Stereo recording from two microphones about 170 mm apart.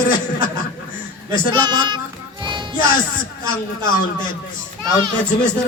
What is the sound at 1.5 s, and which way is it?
Speech, 25° right (ahead or behind).